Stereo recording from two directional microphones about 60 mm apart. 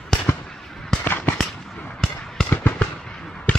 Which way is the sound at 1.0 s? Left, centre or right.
Left.